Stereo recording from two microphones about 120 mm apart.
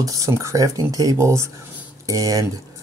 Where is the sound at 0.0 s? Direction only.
25° right (ahead or behind).